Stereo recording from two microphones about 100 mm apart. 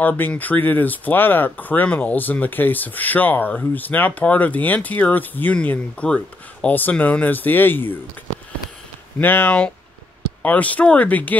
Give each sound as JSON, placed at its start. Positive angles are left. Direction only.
{"t": 0.0, "sound": "speech", "side_deg": 15}
{"t": 9.2, "sound": "speech", "side_deg": 20}